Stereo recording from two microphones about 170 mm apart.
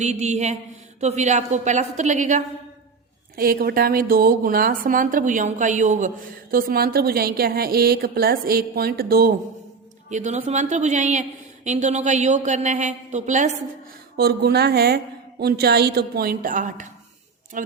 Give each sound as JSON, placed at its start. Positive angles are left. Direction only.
{"t": 0.0, "sound": "mantra", "side_deg": -40}
{"t": 0.9, "sound": "a woman's voice", "side_deg": -40}
{"t": 3.3, "sound": "a woman's voice", "side_deg": -60}
{"t": 10.1, "sound": "a woman's voice", "side_deg": -45}
{"t": 14.2, "sound": "a woman's voice", "side_deg": -70}